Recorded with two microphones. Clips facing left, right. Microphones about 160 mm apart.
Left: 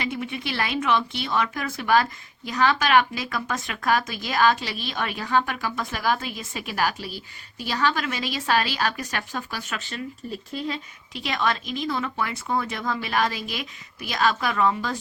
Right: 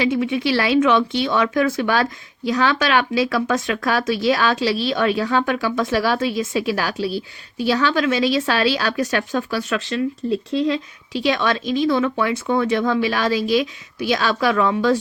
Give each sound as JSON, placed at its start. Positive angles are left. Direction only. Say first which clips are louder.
{"t": 0.1, "sound": "speech", "louder": "right 11 dB", "side_deg": -90}
{"t": 10.5, "sound": "speech", "louder": "right 7 dB", "side_deg": -90}